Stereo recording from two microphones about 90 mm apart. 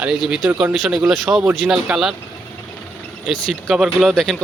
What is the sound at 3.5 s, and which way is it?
Speech, centre (ahead or behind).